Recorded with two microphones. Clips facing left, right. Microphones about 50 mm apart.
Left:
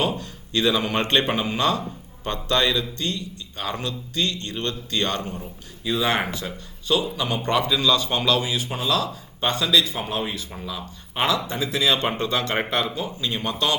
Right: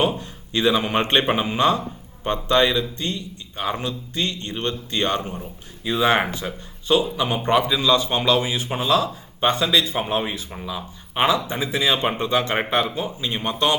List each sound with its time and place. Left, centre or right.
0.0 s a man's voice: right
10.5 s a man's voice: centre